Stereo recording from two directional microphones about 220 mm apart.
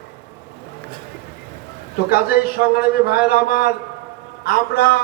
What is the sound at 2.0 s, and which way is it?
A man's voice, 45° left (ahead or behind).